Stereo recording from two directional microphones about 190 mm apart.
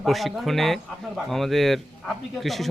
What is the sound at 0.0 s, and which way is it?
Speech, centre (ahead or behind).